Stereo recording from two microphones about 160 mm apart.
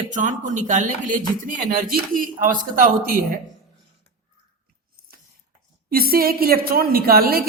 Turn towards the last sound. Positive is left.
turn(degrees=-70)  # may be behind; listen again after turning